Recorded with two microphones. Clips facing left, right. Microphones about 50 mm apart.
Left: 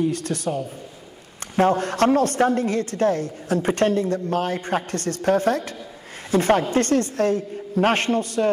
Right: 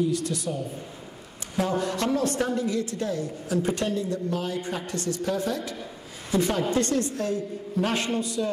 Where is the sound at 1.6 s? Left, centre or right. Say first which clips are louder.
Left 7 dB; left.